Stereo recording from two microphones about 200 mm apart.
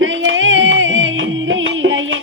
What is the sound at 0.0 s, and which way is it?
Music, 75° right (ahead or behind).